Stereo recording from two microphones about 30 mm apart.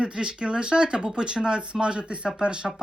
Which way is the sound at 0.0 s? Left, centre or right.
Right.